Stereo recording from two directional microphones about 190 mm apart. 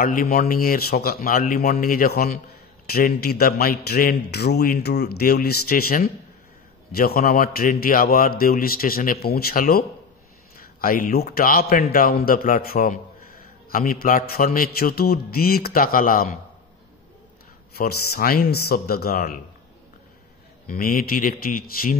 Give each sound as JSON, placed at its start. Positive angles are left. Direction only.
{"t": 0.0, "sound": "a man's voice", "side_deg": 45}
{"t": 17.7, "sound": "a man's voice", "side_deg": 55}
{"t": 20.6, "sound": "a man's voice", "side_deg": 50}